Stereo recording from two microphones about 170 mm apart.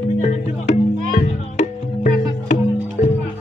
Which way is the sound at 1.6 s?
40° left (ahead or behind).